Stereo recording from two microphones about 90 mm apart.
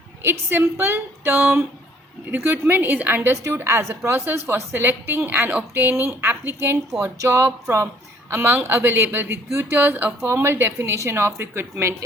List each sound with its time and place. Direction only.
0.2 s a woman's voice: 30° right (ahead or behind)